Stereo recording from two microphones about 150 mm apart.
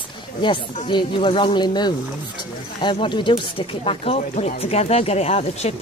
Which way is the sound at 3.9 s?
45° left (ahead or behind).